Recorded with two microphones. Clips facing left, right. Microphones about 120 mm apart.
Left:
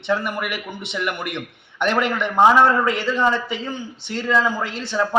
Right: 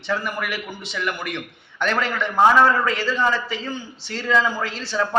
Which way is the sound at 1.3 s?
20° left (ahead or behind).